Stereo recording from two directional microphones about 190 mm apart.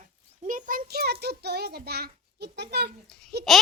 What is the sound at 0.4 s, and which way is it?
A child's voice, 45° right (ahead or behind).